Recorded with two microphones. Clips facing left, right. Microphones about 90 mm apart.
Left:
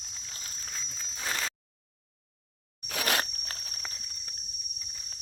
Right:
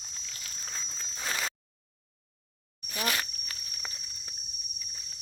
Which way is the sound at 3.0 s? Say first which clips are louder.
Left 2 dB; 50° left (ahead or behind).